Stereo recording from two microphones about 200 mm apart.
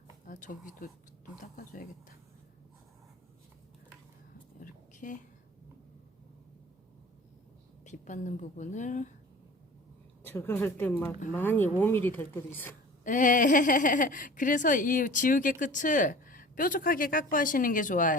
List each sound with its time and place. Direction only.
0.3 s speech: 40° left (ahead or behind)
4.6 s a sound: 40° left (ahead or behind)
7.9 s a woman's voice: 40° left (ahead or behind)
10.2 s a woman's voice: 10° left (ahead or behind)
13.1 s speech: 40° left (ahead or behind)